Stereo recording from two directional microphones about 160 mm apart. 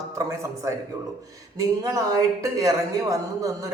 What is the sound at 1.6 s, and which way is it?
A woman's voice, 20° right (ahead or behind).